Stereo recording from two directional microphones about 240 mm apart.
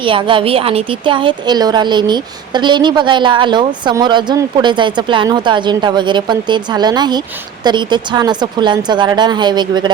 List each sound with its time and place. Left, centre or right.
0.0 s a woman's voice: right